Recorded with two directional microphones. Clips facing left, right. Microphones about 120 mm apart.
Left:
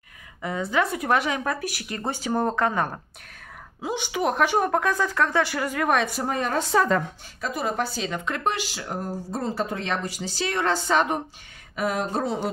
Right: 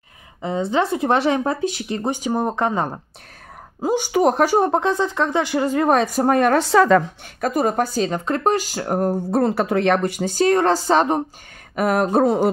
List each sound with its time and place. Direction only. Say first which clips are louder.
0.4 s speech: right 5 dB; 25° right (ahead or behind)
3.8 s speech: right 8 dB; 40° right (ahead or behind); by 7.1 s 90° right
7.3 s speech: right 8 dB; 50° right (ahead or behind)
11.7 s speech: right 8 dB; 55° right (ahead or behind)